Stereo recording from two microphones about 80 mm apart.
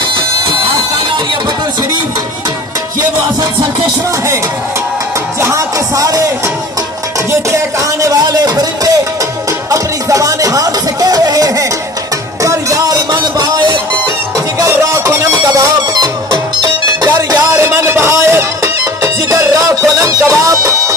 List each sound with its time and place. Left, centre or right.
5.4 s music: right
7.2 s music: right
9.7 s music: right
14.6 s music: right
17.6 s music: right